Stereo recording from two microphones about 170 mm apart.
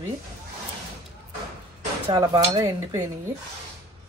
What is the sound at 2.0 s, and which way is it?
Speech, 30° right (ahead or behind).